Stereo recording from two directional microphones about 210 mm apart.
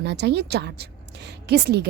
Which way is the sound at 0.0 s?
55° right (ahead or behind).